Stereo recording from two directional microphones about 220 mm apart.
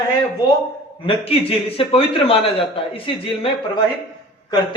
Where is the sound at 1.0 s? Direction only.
25° left (ahead or behind).